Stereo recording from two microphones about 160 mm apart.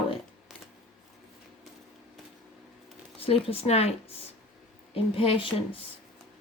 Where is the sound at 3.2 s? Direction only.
35° left (ahead or behind).